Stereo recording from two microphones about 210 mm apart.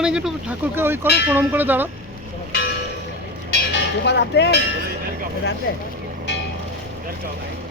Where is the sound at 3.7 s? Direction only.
55° left (ahead or behind).